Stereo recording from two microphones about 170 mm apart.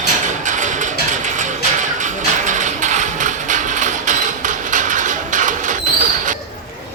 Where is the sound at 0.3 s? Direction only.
45° right (ahead or behind).